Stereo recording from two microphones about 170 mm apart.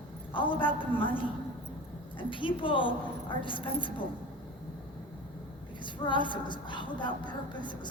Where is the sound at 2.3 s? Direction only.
30° left (ahead or behind).